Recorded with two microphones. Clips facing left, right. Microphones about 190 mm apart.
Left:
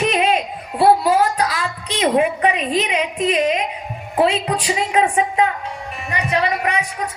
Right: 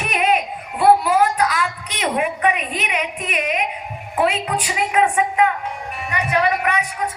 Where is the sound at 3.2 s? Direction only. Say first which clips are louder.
Left 8 dB; 30° left (ahead or behind).